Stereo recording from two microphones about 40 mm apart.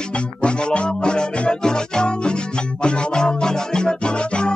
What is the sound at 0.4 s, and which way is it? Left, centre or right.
Music, left.